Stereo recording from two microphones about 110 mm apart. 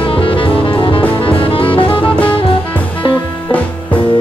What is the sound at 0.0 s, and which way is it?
Music, 50° left (ahead or behind).